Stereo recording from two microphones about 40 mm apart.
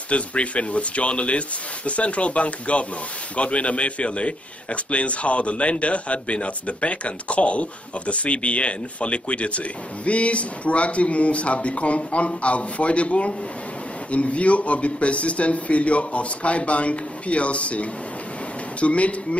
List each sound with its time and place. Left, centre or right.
0.1 s a man's voice: left